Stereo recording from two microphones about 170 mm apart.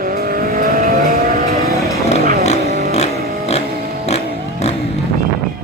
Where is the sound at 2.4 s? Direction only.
40° left (ahead or behind).